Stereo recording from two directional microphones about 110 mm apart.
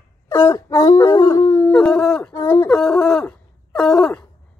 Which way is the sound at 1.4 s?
15° left (ahead or behind).